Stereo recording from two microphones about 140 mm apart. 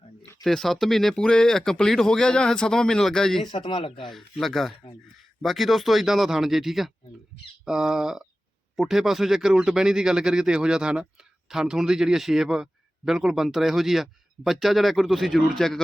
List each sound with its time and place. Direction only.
0.4 s speech: centre (ahead or behind)
3.4 s a man's voice: 35° left (ahead or behind)
4.1 s speech: centre (ahead or behind)